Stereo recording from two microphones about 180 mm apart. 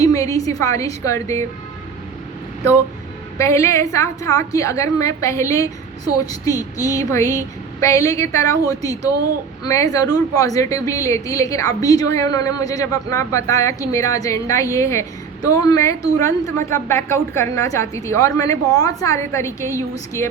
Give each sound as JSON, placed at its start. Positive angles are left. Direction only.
{"t": 0.0, "sound": "a woman's voice", "side_deg": 20}
{"t": 3.3, "sound": "a woman's voice", "side_deg": 15}